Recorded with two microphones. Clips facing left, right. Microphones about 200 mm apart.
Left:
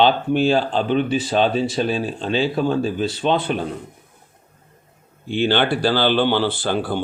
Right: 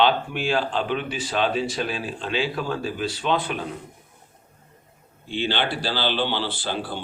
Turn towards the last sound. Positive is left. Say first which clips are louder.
# left 7 dB
turn(degrees=50)  # may be behind; listen again after turning